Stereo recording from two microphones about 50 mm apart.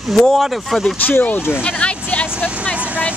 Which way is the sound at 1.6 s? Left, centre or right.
Left.